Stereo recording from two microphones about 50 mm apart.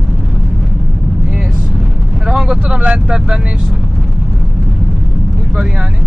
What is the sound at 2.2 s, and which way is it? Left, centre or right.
Vehicle, centre.